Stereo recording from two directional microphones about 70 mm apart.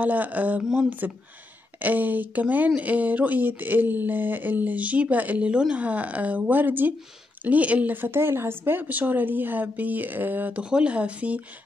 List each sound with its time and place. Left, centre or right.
0.0 s speech: right
10.6 s speech: centre